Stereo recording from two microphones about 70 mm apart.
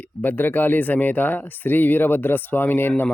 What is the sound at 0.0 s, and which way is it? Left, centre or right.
Speech, left.